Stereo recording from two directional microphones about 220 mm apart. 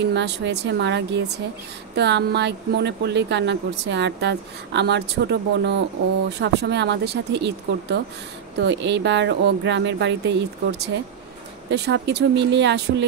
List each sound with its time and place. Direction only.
0.1 s speech: 50° right (ahead or behind)